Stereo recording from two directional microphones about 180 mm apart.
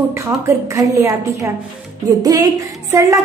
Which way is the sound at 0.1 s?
15° right (ahead or behind).